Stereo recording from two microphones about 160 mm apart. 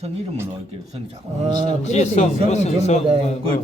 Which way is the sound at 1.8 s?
45° left (ahead or behind).